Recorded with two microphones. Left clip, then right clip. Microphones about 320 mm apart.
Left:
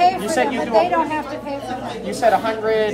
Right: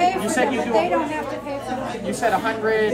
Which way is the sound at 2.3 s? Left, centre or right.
Left.